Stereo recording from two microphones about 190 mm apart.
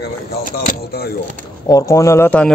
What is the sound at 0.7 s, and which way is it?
Speech, 55° left (ahead or behind).